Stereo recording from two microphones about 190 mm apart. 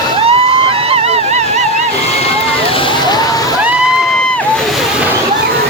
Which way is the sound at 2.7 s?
25° left (ahead or behind).